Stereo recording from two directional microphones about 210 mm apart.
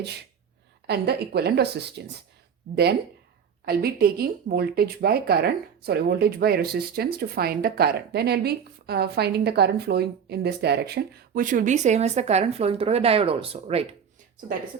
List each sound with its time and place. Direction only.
0.0 s speech: 50° right (ahead or behind)
3.7 s speech: 45° right (ahead or behind); by 13.8 s 30° right (ahead or behind)